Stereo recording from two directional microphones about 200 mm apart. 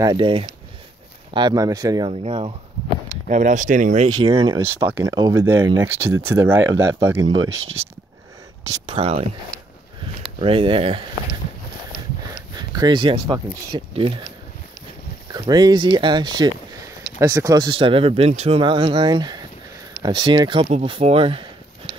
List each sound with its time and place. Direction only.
0.0 s speech: 25° right (ahead or behind); by 4.1 s 40° right (ahead or behind)
4.2 s speech: 20° right (ahead or behind)
7.6 s speech: 30° right (ahead or behind)
10.4 s speech: 25° right (ahead or behind)
12.5 s speech: 20° right (ahead or behind)
15.3 s speech: 20° right (ahead or behind)